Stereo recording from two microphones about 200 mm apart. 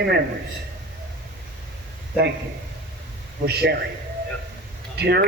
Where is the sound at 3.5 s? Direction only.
55° right (ahead or behind).